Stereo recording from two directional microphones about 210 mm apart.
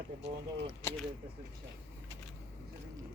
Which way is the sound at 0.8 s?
10° left (ahead or behind).